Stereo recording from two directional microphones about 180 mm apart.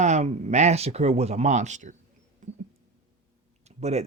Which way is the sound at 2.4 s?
45° right (ahead or behind).